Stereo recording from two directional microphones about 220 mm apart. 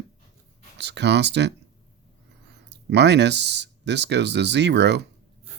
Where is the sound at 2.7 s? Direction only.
50° right (ahead or behind).